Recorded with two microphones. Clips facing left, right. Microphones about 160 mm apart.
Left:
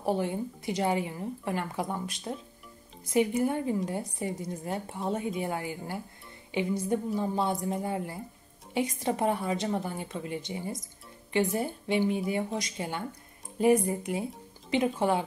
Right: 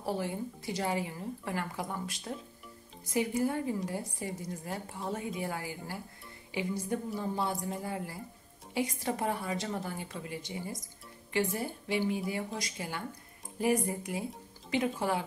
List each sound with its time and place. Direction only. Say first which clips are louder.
0.0 s speech: left 5 dB; 20° left (ahead or behind)